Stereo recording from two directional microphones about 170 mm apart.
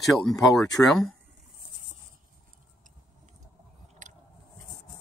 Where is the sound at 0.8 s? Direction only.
Centre (ahead or behind).